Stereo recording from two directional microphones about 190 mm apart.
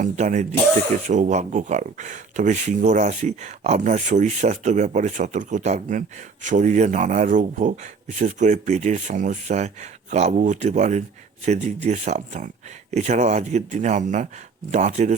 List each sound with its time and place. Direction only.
0.0 s speech: 40° right (ahead or behind)